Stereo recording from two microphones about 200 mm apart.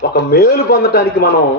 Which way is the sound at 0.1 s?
50° left (ahead or behind).